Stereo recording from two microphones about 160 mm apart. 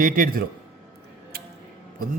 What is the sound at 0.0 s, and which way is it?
Speech, 60° right (ahead or behind).